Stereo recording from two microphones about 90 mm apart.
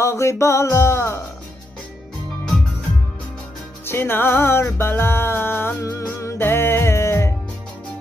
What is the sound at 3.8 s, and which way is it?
Music, 25° left (ahead or behind).